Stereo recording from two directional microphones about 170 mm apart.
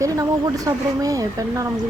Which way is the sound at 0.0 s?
20° right (ahead or behind).